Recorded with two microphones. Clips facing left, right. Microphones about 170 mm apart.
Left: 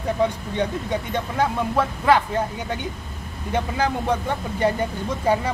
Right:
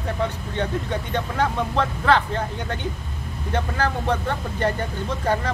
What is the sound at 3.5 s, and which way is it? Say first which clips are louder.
Speech: left 1 dB; 15° left (ahead or behind).